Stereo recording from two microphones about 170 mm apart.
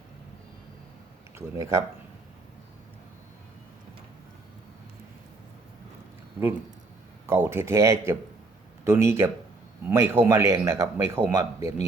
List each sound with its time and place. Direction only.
1.4 s a man's voice: 15° right (ahead or behind)
7.3 s a man's voice: 15° right (ahead or behind)